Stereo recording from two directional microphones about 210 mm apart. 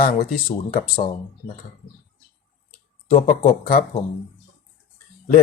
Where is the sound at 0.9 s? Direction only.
25° left (ahead or behind).